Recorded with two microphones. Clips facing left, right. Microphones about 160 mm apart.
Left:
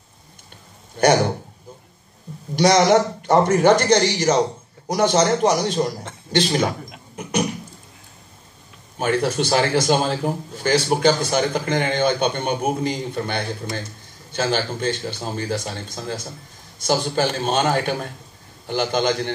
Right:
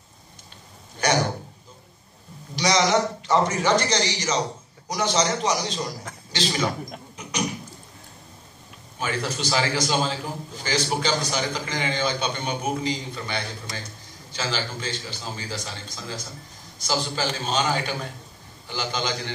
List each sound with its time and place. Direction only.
2.5 s a man's voice: 55° left (ahead or behind)
7.2 s a sound: 55° left (ahead or behind)
8.9 s a man's voice: 55° left (ahead or behind)